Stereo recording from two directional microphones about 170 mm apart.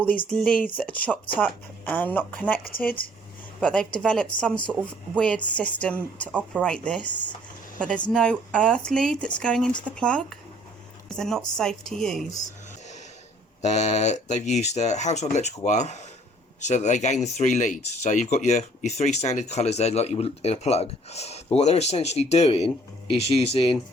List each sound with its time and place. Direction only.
0.3 s a woman's voice: 5° left (ahead or behind)
2.7 s speech: 60° left (ahead or behind)
3.6 s a woman's voice: 5° left (ahead or behind)
13.6 s speech: 40° left (ahead or behind)